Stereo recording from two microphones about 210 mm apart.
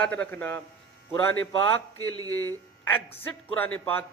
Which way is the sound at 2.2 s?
20° right (ahead or behind).